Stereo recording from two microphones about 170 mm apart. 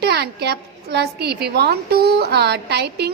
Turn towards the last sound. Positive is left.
turn(degrees=-75)  # may be behind; listen again after turning